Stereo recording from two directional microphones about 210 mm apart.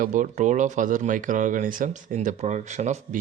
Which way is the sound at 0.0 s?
35° right (ahead or behind).